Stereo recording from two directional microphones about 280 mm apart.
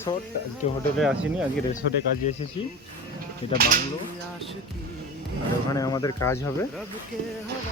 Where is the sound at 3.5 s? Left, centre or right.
Right.